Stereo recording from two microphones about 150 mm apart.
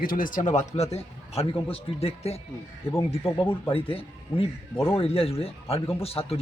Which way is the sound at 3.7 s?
40° left (ahead or behind).